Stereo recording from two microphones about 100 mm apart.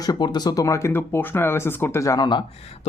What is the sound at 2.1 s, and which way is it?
Speech, 45° left (ahead or behind).